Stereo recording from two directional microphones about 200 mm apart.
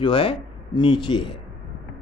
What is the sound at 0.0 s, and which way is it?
Speech, 25° left (ahead or behind).